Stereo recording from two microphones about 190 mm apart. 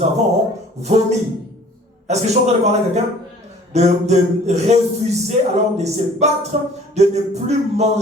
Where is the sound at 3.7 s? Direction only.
35° right (ahead or behind).